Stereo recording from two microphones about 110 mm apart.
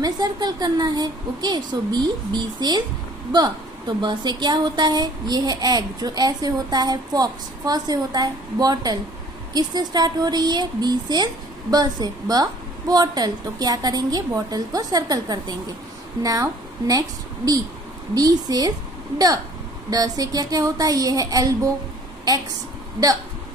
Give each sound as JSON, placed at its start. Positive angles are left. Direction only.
{"t": 0.0, "sound": "a woman's voice", "side_deg": -40}
{"t": 18.1, "sound": "a woman's voice", "side_deg": -35}